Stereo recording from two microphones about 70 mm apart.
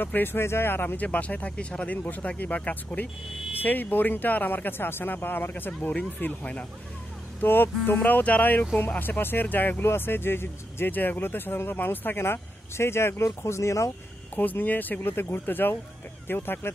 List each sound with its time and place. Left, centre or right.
0.0 s speech: left
7.4 s speech: left
14.3 s speech: left